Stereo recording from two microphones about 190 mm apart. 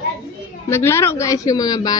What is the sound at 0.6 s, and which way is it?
A woman's voice, 15° left (ahead or behind).